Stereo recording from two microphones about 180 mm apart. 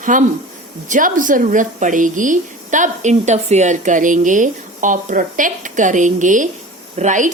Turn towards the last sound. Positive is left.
turn(degrees=-45)  # may be behind; listen again after turning